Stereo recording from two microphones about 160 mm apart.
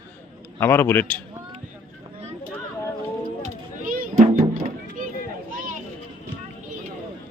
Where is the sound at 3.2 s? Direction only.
55° right (ahead or behind).